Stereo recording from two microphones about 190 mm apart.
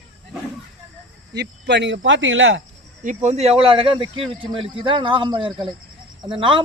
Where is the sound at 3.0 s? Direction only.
40° right (ahead or behind).